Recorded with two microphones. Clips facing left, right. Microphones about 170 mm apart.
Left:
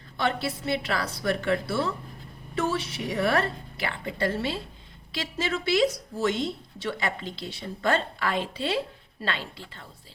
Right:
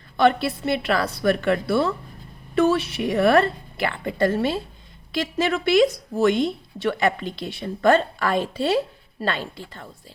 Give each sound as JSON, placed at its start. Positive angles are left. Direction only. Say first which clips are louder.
{"t": 0.2, "sound": "a woman's voice", "louder": "right 9 dB", "side_deg": -60}